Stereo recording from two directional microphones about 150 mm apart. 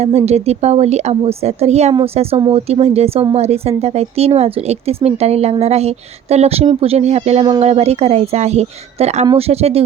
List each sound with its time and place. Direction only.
0.0 s a woman's voice: 45° right (ahead or behind)